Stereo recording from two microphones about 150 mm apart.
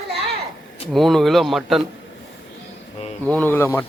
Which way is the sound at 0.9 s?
Centre (ahead or behind).